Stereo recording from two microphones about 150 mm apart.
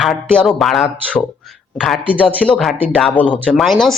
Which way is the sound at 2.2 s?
5° left (ahead or behind).